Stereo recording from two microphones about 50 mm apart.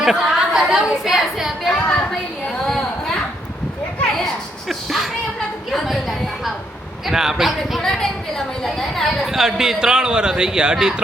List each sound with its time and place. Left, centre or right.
0.0 s a woman's voice: centre
1.7 s a woman's voice: left
4.7 s a sound: centre
7.1 s speech: centre
7.8 s a woman's voice: centre
9.2 s speech: centre